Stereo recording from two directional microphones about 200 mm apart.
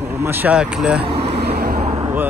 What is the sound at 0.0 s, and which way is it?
Speech, 10° right (ahead or behind).